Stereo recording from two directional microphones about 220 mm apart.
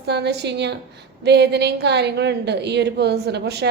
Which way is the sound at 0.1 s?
50° right (ahead or behind).